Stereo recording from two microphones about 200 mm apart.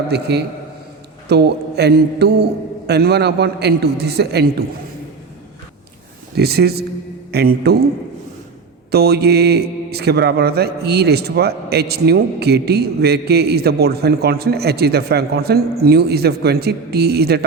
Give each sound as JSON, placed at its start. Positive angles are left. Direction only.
{"t": 0.1, "sound": "a man's voice", "side_deg": -55}
{"t": 6.3, "sound": "a man's voice", "side_deg": -50}
{"t": 8.9, "sound": "speech", "side_deg": -55}